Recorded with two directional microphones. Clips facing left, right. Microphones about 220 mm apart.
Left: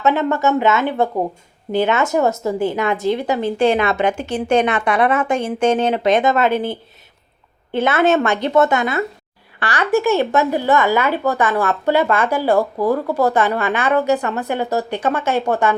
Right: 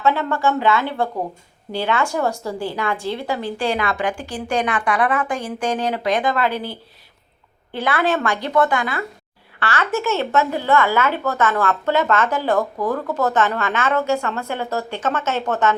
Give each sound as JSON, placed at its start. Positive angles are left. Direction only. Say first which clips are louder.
{"t": 0.0, "sound": "a woman's voice", "louder": "left 3 dB", "side_deg": 20}